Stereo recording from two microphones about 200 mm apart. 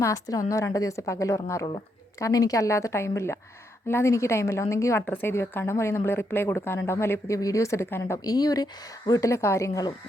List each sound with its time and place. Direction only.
0.0 s a woman's voice: 15° left (ahead or behind)